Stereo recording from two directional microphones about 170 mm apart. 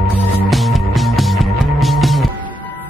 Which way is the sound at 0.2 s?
Centre (ahead or behind).